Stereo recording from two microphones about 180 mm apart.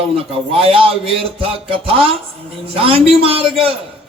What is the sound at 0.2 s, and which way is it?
Speech, 30° right (ahead or behind).